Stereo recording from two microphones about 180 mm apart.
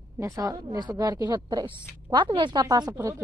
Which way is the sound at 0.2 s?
20° right (ahead or behind).